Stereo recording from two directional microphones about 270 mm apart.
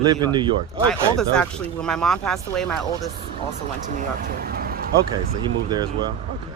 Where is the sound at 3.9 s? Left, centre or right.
Right.